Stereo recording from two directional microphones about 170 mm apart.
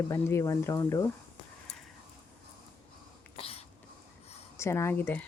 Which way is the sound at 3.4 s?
35° left (ahead or behind).